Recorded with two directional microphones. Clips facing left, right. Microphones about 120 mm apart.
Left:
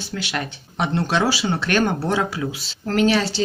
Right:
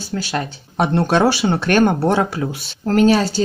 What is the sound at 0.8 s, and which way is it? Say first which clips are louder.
A woman's voice: right 5 dB; 50° right (ahead or behind).